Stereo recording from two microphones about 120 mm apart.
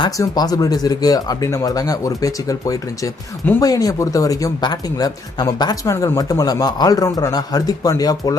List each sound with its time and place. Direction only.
0.2 s speech: 30° left (ahead or behind)